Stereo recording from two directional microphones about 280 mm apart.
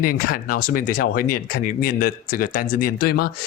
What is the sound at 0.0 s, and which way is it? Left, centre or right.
Speech, left.